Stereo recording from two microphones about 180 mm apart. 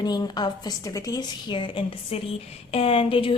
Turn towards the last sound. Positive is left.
turn(degrees=30)  # may be behind; listen again after turning